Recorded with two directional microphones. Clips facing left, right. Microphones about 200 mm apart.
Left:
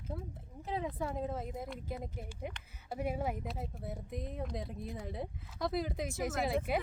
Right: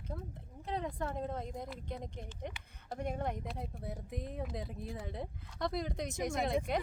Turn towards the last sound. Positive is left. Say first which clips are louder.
# even
turn(degrees=5)  # may be behind; listen again after turning